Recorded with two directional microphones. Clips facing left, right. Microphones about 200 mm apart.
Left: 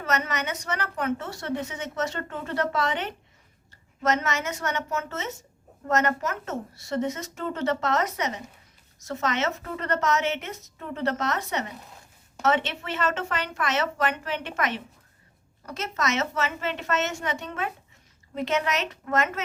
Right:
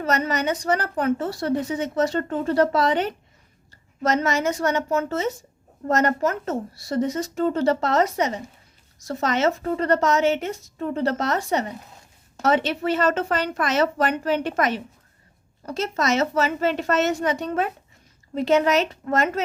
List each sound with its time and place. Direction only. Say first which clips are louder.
0.0 s a woman's voice: right 5 dB; 35° right (ahead or behind)